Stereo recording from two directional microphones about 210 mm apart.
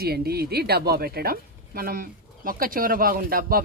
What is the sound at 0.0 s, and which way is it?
A woman's voice, 50° right (ahead or behind).